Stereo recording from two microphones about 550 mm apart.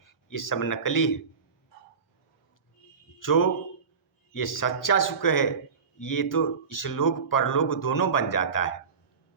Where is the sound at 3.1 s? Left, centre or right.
Left.